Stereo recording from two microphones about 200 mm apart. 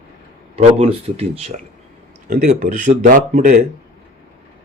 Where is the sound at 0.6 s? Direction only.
30° right (ahead or behind).